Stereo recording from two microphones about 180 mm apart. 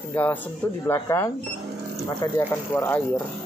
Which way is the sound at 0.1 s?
10° left (ahead or behind).